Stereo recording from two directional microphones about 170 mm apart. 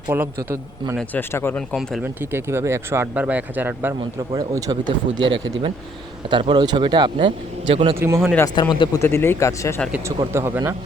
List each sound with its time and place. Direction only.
0.1 s a man's voice: 10° right (ahead or behind)
0.9 s speech: 10° left (ahead or behind)
1.7 s speech: centre (ahead or behind)
2.3 s a man's voice: 15° right (ahead or behind)
7.9 s a man's voice: 15° right (ahead or behind)
8.7 s speech: 25° left (ahead or behind)
9.0 s speech: 15° left (ahead or behind)
10.3 s a man's voice: 15° right (ahead or behind)